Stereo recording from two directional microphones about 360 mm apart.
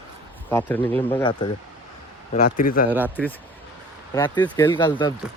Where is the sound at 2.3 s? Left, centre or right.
Left.